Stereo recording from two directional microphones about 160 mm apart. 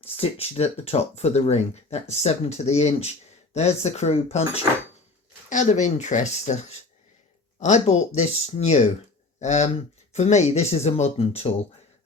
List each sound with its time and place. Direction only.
0.2 s speech: 40° left (ahead or behind)